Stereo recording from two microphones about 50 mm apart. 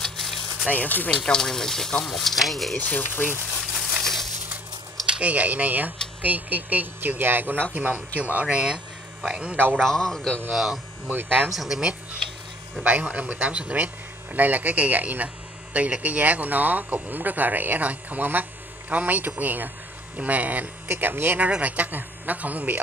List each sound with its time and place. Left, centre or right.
0.2 s a sound: centre
0.7 s speech: left
1.2 s speech: centre
2.8 s speech: left
3.7 s a sound: centre
4.0 s crushing: centre
5.0 s a sound: centre
5.3 s speech: right
9.8 s speech: centre
10.5 s speech: centre
11.1 s speech: right
11.5 s speech: centre
12.8 s speech: right
21.4 s speech: right